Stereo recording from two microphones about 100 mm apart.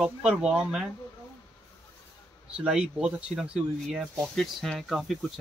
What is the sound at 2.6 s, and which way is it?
Speech, 5° right (ahead or behind).